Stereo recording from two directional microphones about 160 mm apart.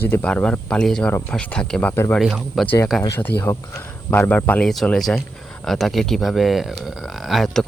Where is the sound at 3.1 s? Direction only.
15° left (ahead or behind).